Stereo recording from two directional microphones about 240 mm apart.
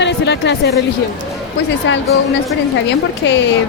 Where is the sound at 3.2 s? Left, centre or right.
Left.